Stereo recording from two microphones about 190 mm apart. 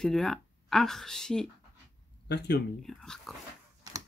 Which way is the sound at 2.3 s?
60° left (ahead or behind).